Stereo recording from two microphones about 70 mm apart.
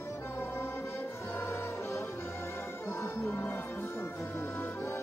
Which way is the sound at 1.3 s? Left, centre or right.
Left.